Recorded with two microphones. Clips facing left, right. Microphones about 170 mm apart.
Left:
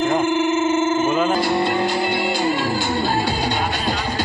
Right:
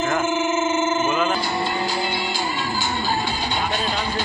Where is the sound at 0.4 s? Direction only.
60° left (ahead or behind).